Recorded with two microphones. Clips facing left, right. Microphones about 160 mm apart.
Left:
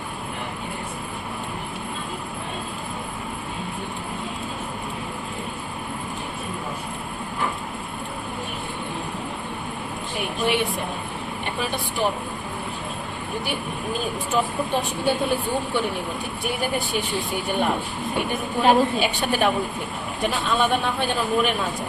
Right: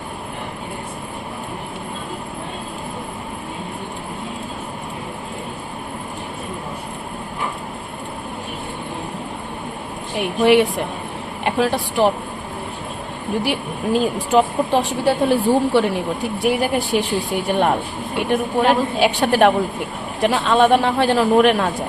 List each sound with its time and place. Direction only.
10.4 s speech: 90° right
13.4 s speech: 90° right
18.3 s speech: 85° right